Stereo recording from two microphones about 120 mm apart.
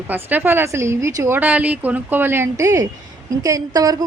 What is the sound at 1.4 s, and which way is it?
A woman's voice, 15° right (ahead or behind).